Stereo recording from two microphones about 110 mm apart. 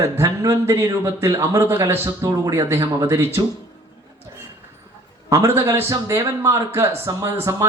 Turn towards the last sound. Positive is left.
turn(degrees=-25)  # may be behind; listen again after turning